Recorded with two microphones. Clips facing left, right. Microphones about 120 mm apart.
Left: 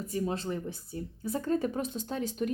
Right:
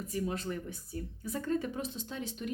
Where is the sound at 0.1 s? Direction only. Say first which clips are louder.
Left 3 dB; 30° left (ahead or behind).